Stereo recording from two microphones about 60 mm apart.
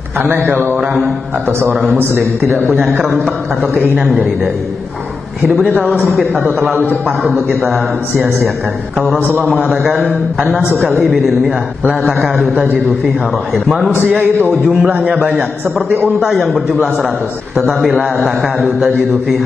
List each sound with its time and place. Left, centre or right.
0.5 s a man's voice: right
0.7 s a man's voice: centre
2.0 s a man's voice: right
5.8 s a man's voice: centre
6.4 s a man's voice: right
7.3 s a man's voice: centre
9.8 s a man's voice: centre
14.5 s a man's voice: centre
16.2 s a man's voice: centre